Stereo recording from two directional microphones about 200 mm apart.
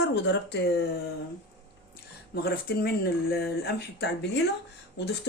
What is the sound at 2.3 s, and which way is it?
Speech, 55° left (ahead or behind).